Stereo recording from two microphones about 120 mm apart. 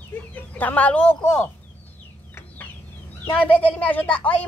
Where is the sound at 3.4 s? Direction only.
15° left (ahead or behind).